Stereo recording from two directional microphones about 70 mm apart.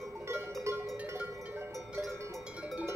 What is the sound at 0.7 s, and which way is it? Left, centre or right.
Music, right.